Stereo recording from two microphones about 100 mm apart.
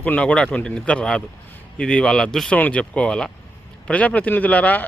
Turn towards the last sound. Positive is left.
turn(degrees=15)  # may be behind; listen again after turning